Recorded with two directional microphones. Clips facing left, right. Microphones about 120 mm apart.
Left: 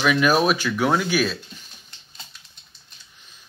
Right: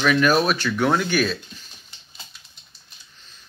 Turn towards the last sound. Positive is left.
turn(degrees=15)  # may be behind; listen again after turning